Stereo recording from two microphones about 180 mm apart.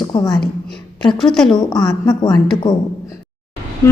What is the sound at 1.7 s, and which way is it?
Speech, 20° left (ahead or behind).